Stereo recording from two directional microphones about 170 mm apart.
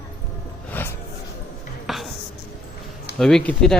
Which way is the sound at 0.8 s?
10° left (ahead or behind).